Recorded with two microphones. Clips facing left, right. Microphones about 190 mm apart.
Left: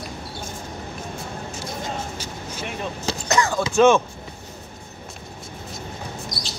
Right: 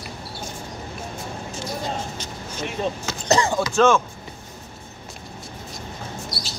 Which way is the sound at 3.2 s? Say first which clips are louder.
Right 2 dB; 35° right (ahead or behind).